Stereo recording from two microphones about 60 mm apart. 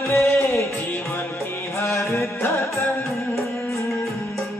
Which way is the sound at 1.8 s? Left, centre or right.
Left.